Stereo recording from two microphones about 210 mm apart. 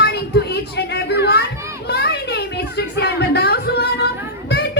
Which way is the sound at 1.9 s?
50° left (ahead or behind).